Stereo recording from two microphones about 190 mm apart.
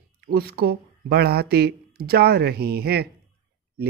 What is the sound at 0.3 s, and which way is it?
Speech, 55° right (ahead or behind).